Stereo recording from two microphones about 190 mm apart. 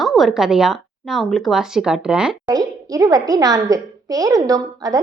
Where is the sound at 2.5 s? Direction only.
20° right (ahead or behind).